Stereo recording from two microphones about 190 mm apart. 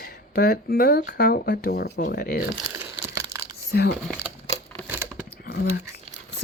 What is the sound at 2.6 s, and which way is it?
Crumpling, 15° right (ahead or behind).